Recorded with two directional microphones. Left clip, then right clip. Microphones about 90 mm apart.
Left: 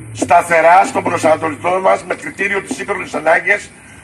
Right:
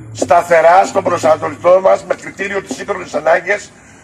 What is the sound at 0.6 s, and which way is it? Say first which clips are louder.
A man's voice: right 1 dB; 5° right (ahead or behind).